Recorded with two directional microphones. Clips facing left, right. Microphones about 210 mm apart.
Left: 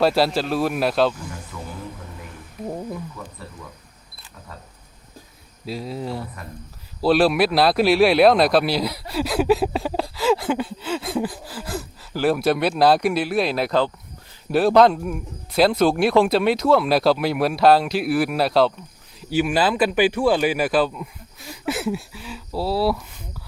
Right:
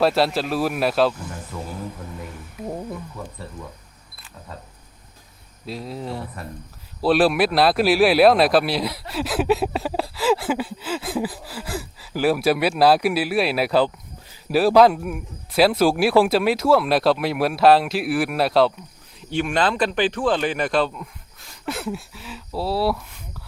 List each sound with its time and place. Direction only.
0.0 s speech: centre (ahead or behind)
1.5 s music: 45° right (ahead or behind)
5.6 s speech: centre (ahead or behind)